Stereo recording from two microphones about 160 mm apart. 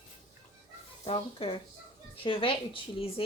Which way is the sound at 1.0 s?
35° left (ahead or behind).